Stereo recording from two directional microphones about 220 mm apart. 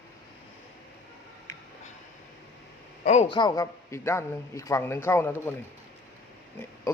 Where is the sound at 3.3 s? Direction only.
20° left (ahead or behind).